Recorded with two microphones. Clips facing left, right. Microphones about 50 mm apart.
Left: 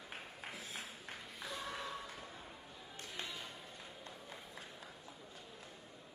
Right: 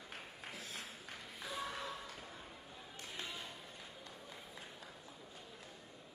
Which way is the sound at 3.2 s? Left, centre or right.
Left.